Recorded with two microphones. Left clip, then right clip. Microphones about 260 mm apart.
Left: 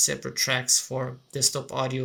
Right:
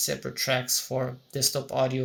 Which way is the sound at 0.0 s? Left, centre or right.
Centre.